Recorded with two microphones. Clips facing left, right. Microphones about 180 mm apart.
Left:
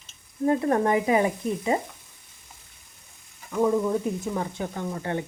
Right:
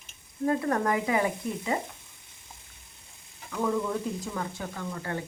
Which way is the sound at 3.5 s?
25° left (ahead or behind).